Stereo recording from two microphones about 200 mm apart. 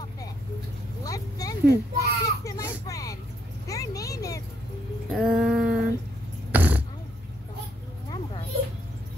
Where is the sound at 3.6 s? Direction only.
15° left (ahead or behind).